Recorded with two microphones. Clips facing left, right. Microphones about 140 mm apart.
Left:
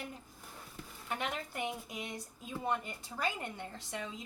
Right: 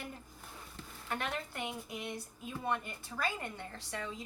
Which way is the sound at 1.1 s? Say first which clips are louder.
Even; 15° left (ahead or behind).